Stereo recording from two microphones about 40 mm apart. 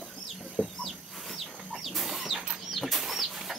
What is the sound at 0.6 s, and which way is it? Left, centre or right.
Chicken, right.